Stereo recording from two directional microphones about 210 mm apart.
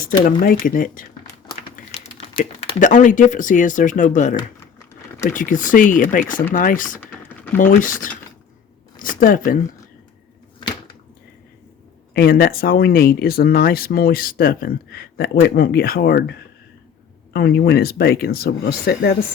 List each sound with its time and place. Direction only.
0.3 s speech: 40° left (ahead or behind)
1.5 s typing: 25° left (ahead or behind)
2.8 s speech: 35° left (ahead or behind)
9.0 s a sound: 40° left (ahead or behind)
12.1 s speech: 45° left (ahead or behind)